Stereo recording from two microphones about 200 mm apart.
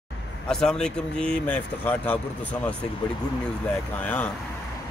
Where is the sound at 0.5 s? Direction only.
5° left (ahead or behind).